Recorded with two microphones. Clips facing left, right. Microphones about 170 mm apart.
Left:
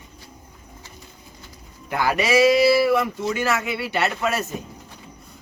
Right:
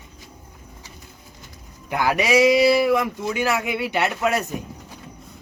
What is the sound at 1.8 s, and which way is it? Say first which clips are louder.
A man's voice: right 1 dB; 15° right (ahead or behind).